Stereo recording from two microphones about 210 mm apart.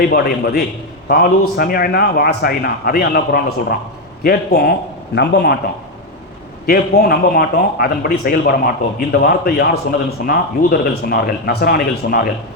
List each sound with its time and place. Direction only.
0.0 s a man's voice: 45° left (ahead or behind)
6.7 s a man's voice: 45° left (ahead or behind)